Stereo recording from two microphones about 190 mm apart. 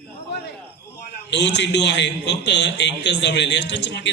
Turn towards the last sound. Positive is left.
turn(degrees=70)  # may be behind; listen again after turning